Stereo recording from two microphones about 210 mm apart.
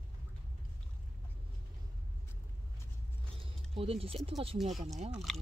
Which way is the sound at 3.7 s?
25° right (ahead or behind).